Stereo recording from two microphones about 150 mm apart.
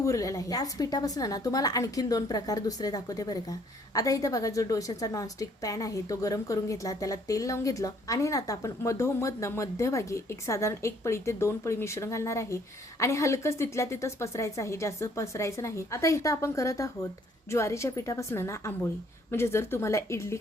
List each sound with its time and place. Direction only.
0.0 s a woman's voice: 20° left (ahead or behind)